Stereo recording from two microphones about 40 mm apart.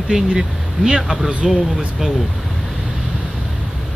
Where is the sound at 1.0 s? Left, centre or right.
Centre.